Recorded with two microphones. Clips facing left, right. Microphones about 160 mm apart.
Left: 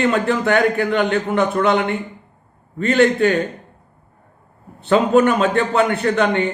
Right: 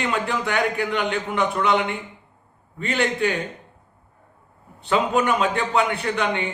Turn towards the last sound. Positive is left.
turn(degrees=45)  # may be behind; listen again after turning